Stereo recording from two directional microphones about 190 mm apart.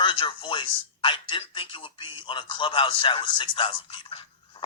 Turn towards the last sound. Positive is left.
turn(degrees=25)  # may be behind; listen again after turning